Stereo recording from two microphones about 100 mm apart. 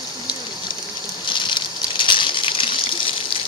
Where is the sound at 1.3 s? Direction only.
50° left (ahead or behind).